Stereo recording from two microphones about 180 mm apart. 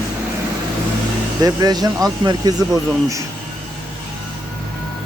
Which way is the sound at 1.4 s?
20° right (ahead or behind).